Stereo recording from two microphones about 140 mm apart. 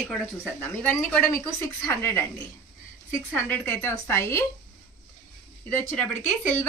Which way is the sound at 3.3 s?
15° left (ahead or behind).